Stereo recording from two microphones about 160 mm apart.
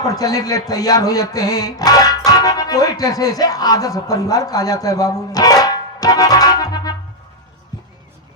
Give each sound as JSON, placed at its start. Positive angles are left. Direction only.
{"t": 0.0, "sound": "speech", "side_deg": 20}